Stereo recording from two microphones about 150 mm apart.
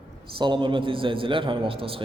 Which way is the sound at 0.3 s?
30° right (ahead or behind).